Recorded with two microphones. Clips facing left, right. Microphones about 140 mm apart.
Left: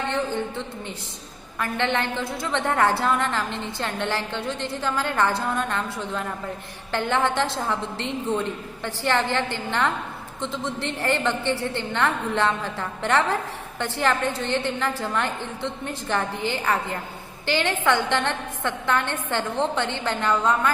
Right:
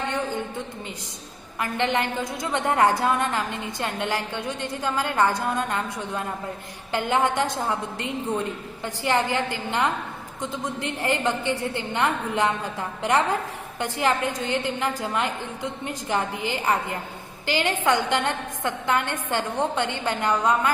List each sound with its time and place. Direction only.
1.5 s a woman's voice: 15° right (ahead or behind)